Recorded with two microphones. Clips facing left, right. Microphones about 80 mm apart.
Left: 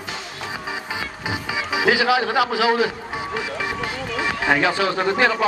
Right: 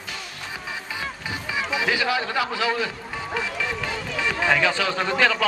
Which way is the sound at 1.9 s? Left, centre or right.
Left.